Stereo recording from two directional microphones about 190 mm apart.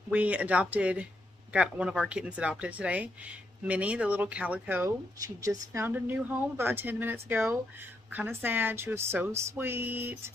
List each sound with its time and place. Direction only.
0.1 s speech: 5° right (ahead or behind)